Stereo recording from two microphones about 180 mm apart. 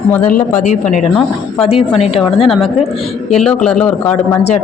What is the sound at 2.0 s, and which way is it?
Speech, 30° left (ahead or behind).